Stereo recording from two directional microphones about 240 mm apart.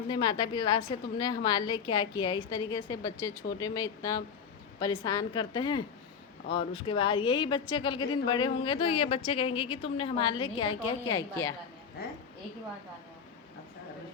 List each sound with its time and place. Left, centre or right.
0.1 s a woman's voice: centre